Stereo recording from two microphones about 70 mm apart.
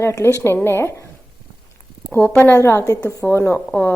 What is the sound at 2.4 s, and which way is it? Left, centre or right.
Speech, left.